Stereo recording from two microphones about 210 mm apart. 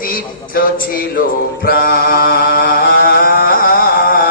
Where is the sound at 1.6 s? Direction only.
45° left (ahead or behind).